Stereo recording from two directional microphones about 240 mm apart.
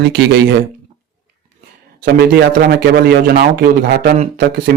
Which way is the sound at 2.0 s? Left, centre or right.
Right.